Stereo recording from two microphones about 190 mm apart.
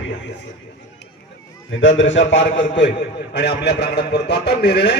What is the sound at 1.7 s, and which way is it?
Speech, 85° left.